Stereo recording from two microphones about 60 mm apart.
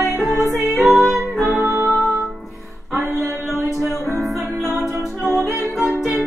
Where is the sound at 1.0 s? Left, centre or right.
Right.